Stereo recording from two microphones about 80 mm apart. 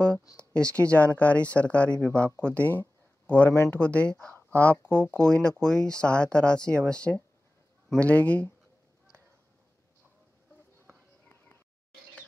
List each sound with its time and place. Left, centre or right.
0.4 s speech: centre